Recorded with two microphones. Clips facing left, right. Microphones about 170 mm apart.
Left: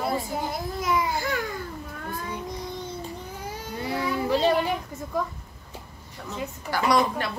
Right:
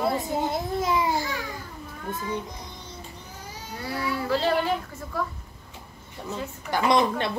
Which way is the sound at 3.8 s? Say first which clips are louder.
Left 2 dB; 20° left (ahead or behind).